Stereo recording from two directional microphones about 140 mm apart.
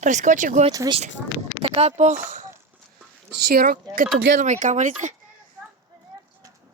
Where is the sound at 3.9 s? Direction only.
75° right (ahead or behind).